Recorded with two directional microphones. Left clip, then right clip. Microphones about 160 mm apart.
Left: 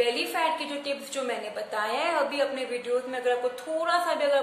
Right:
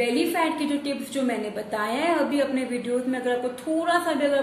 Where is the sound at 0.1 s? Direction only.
15° left (ahead or behind).